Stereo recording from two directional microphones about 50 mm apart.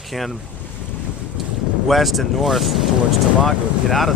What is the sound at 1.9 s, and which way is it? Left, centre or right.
Speech, centre.